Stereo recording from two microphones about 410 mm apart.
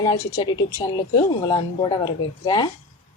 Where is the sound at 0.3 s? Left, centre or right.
Centre.